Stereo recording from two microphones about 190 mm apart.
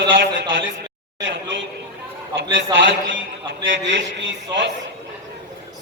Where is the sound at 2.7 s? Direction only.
70° right (ahead or behind).